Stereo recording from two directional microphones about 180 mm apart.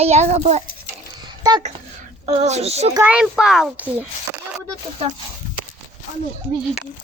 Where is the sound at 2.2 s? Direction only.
40° right (ahead or behind).